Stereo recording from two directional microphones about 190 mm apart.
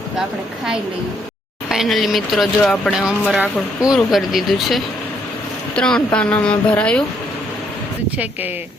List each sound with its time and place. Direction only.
0.2 s speech: centre (ahead or behind)